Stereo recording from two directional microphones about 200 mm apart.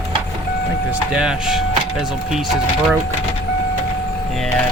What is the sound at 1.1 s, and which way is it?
Speech, 5° right (ahead or behind).